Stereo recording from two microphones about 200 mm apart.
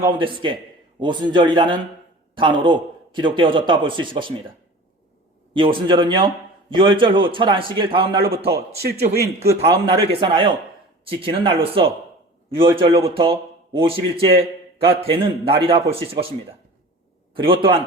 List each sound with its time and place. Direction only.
0.1 s a man's voice: 25° right (ahead or behind)
5.5 s a man's voice: 25° right (ahead or behind)
9.6 s a man's voice: 25° right (ahead or behind)
17.4 s a man's voice: 25° right (ahead or behind)